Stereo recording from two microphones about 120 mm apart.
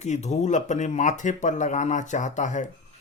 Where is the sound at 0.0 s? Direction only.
75° left (ahead or behind); by 2.6 s 90° left.